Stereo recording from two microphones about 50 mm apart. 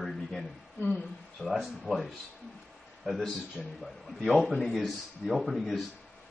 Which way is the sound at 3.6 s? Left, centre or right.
Centre.